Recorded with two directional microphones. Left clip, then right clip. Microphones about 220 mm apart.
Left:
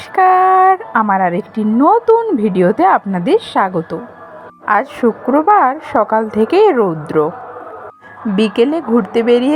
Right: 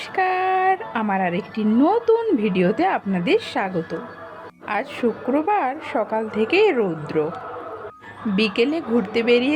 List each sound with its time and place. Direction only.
0.2 s a woman's voice: 15° left (ahead or behind)
8.4 s speech: 20° left (ahead or behind)